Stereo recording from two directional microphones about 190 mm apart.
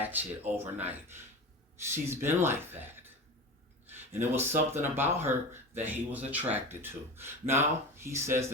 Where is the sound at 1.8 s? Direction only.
15° right (ahead or behind).